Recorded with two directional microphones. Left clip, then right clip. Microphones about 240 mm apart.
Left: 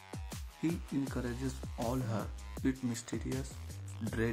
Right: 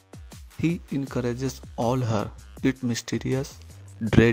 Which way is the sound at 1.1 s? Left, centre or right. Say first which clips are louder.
Right 11 dB; right.